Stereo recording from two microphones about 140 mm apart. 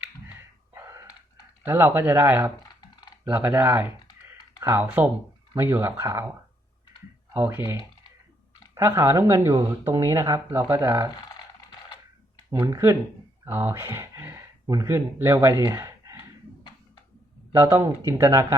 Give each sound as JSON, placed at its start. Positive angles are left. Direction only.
{"t": 0.7, "sound": "a sound", "side_deg": -20}
{"t": 1.6, "sound": "speech", "side_deg": -15}
{"t": 7.3, "sound": "speech", "side_deg": -15}
{"t": 12.5, "sound": "speech", "side_deg": -20}
{"t": 17.5, "sound": "speech", "side_deg": -20}